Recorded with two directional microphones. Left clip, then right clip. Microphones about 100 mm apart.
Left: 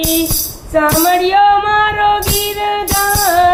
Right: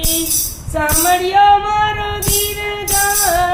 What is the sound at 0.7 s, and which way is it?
Music, 40° left (ahead or behind).